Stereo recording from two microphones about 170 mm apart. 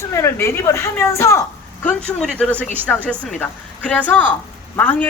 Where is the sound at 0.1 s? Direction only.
15° left (ahead or behind).